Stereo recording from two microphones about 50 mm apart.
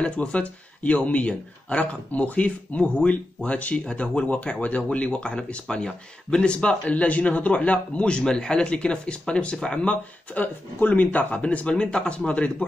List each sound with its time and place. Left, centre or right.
0.0 s speech: left
10.3 s speech: left